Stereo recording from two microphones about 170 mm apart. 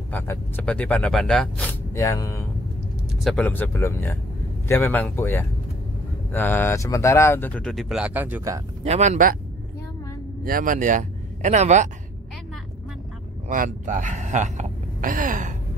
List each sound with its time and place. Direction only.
0.1 s speech: 10° left (ahead or behind)
2.0 s speech: 20° left (ahead or behind); by 8.6 s 15° right (ahead or behind)
8.8 s speech: 40° right (ahead or behind)
10.4 s speech: 55° right (ahead or behind)
13.5 s speech: 50° right (ahead or behind)